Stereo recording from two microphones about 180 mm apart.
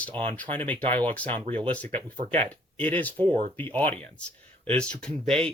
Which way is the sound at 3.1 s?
30° right (ahead or behind).